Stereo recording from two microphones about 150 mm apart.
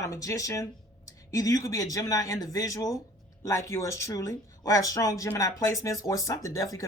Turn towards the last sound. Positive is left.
turn(degrees=20)  # may be behind; listen again after turning